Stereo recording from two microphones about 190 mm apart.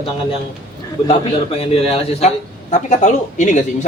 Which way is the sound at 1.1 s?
30° left (ahead or behind).